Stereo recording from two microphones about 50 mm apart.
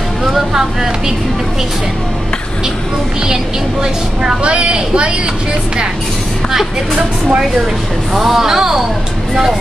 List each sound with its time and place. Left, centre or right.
0.2 s speech: centre
3.8 s speech: centre
8.1 s speech: centre